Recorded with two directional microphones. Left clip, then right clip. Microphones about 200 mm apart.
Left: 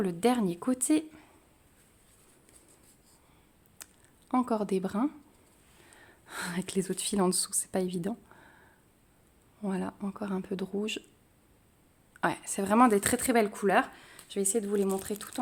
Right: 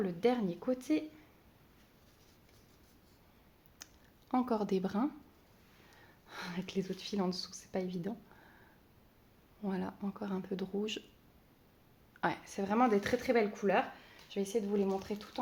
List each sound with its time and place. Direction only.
0.0 s speech: 40° left (ahead or behind)
3.8 s a sound: 20° left (ahead or behind)
4.3 s speech: 20° left (ahead or behind)
6.0 s speech: 35° left (ahead or behind)
9.6 s speech: 25° left (ahead or behind)
12.2 s speech: 35° left (ahead or behind)